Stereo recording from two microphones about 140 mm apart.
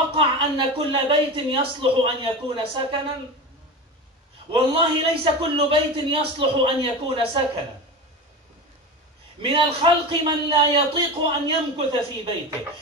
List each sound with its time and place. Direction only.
0.1 s a man's voice: 40° right (ahead or behind)
4.5 s a man's voice: 40° right (ahead or behind)
9.4 s a man's voice: 40° right (ahead or behind)